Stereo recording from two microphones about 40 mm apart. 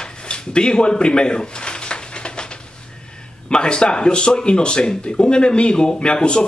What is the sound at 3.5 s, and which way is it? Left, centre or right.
Speech, left.